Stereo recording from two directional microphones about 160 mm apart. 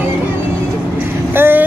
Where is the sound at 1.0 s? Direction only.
10° right (ahead or behind).